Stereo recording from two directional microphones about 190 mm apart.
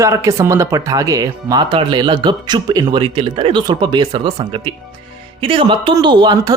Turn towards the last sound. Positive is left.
turn(degrees=-20)  # may be behind; listen again after turning